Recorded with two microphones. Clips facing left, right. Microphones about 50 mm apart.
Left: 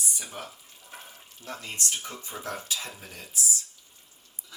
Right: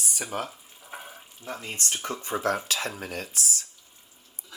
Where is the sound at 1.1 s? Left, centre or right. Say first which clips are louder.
Even; centre.